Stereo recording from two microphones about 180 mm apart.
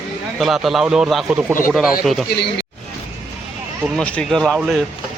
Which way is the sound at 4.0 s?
5° left (ahead or behind).